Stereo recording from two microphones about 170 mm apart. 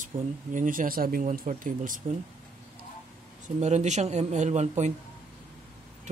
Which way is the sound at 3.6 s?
40° right (ahead or behind).